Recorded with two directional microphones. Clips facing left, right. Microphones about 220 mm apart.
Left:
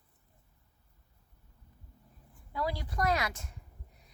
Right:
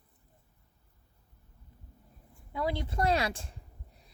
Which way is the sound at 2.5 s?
25° right (ahead or behind).